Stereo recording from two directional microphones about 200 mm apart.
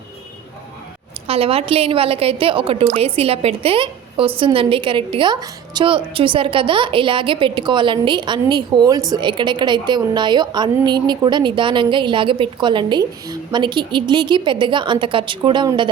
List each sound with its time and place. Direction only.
1.3 s a woman's voice: 30° right (ahead or behind)